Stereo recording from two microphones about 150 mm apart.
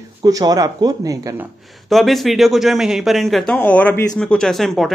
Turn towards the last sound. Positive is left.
turn(degrees=0)  # may be behind; listen again after turning